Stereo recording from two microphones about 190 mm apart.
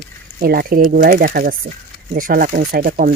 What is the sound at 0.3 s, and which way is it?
Speech, 50° right (ahead or behind).